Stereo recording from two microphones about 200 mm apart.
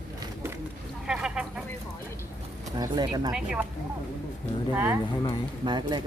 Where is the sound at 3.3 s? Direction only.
5° right (ahead or behind).